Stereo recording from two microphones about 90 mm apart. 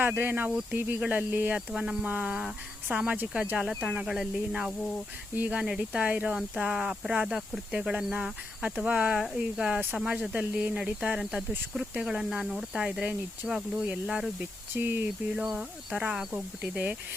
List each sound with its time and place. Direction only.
0.0 s speech: 25° right (ahead or behind)
1.7 s speech: 5° right (ahead or behind)
3.6 s speech: 5° right (ahead or behind)
14.8 s speech: 20° right (ahead or behind)
15.4 s speech: 10° right (ahead or behind)